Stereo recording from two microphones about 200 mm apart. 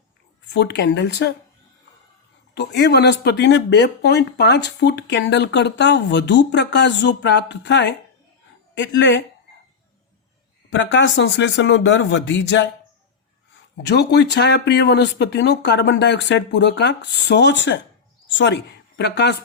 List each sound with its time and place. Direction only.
0.5 s speech: 60° left (ahead or behind)
2.6 s speech: 60° left (ahead or behind)
10.7 s speech: 65° left (ahead or behind)
13.8 s speech: 55° left (ahead or behind)